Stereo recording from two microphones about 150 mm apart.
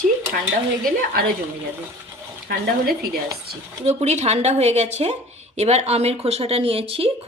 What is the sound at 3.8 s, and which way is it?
A woman's voice, 50° right (ahead or behind).